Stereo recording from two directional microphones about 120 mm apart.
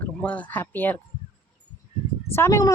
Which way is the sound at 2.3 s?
25° left (ahead or behind).